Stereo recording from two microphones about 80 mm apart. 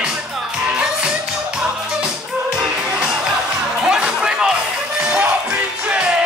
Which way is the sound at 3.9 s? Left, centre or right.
Centre.